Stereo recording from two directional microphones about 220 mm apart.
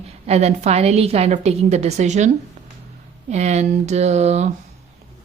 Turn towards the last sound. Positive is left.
turn(degrees=-30)  # may be behind; listen again after turning